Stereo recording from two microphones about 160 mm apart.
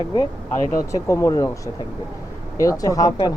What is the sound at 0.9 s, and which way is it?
Speech, 20° left (ahead or behind).